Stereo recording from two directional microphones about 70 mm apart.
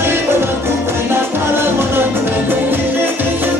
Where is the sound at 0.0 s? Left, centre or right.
Right.